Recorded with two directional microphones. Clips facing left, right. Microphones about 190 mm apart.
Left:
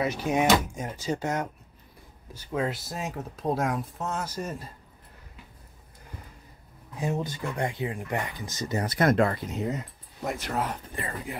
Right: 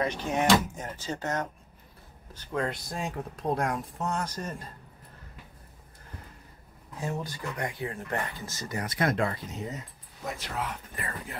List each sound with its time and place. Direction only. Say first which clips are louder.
0.0 s speech: left 3 dB; 10° left (ahead or behind)
7.0 s speech: left 4 dB; 20° left (ahead or behind)
8.8 s speech: left 5 dB; 45° left (ahead or behind); by 9.8 s 60° left (ahead or behind)
10.4 s speech: left 4 dB; 45° left (ahead or behind)
11.0 s speech: left 4 dB; 25° left (ahead or behind)